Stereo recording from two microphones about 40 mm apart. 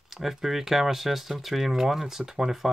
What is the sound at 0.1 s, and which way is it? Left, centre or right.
Speech, centre.